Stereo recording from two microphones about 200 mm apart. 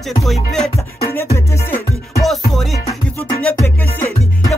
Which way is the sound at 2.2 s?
Centre (ahead or behind).